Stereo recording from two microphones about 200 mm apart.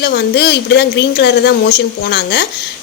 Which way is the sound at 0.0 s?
55° left (ahead or behind).